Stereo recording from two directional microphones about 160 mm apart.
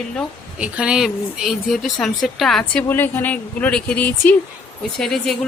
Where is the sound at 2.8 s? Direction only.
15° left (ahead or behind).